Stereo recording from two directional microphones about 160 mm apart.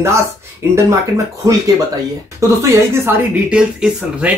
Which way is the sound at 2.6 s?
15° right (ahead or behind).